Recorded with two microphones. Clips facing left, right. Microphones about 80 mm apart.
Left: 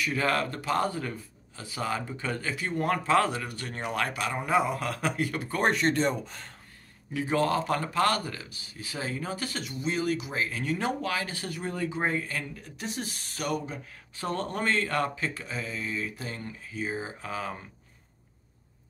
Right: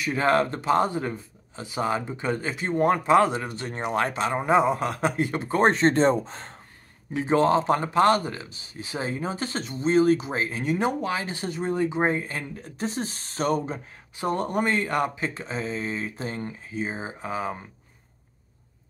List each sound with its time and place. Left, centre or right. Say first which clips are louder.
0.0 s speech: right 5 dB; right
14.1 s speech: right 6 dB; centre